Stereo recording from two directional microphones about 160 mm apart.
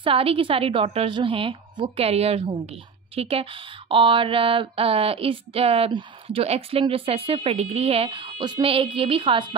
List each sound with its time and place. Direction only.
0.0 s a woman's voice: 35° right (ahead or behind)